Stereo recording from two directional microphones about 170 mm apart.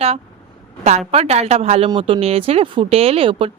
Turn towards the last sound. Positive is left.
turn(degrees=-30)  # may be behind; listen again after turning